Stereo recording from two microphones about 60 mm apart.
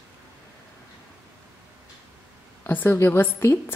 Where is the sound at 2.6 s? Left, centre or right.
Left.